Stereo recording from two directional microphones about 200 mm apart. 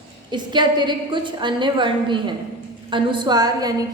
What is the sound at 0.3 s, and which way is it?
A woman's voice, 20° right (ahead or behind).